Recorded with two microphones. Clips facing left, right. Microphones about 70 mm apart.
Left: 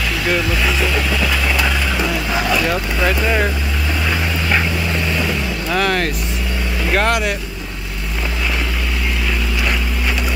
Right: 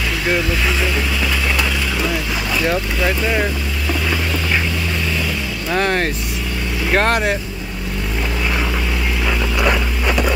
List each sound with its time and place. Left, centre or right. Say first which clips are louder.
5.8 s speech: even; right